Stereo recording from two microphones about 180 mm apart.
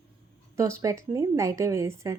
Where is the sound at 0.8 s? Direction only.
20° right (ahead or behind).